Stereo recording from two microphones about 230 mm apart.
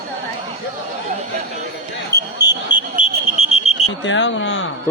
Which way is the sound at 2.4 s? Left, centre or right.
Centre.